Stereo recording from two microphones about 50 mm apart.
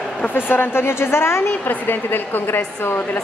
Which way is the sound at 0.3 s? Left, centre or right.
Left.